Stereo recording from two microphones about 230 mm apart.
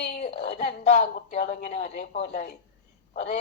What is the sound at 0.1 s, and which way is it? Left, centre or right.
A woman's voice, left.